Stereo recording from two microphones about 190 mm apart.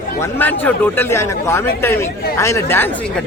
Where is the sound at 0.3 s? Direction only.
10° left (ahead or behind).